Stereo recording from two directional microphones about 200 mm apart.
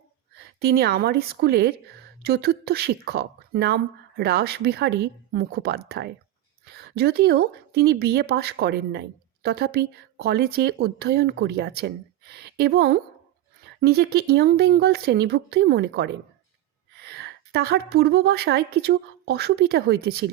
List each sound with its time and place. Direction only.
0.6 s a woman's voice: 50° right (ahead or behind)